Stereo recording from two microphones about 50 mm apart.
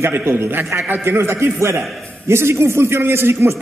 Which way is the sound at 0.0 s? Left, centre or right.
Right.